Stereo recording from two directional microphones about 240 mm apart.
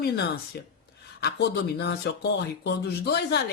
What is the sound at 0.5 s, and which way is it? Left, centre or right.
Speech, left.